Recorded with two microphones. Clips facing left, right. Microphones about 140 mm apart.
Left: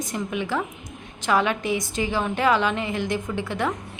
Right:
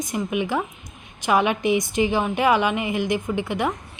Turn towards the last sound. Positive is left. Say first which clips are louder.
# right 2 dB
turn(degrees=-15)  # may be behind; listen again after turning